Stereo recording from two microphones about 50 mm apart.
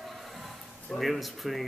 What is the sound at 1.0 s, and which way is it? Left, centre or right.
Speech, centre.